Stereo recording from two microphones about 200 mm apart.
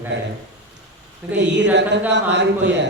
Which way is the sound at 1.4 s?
60° right (ahead or behind).